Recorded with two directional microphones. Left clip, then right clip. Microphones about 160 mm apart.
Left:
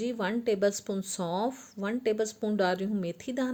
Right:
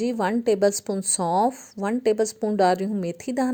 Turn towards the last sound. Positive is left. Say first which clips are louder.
# right 7 dB
turn(degrees=-45)  # may be behind; listen again after turning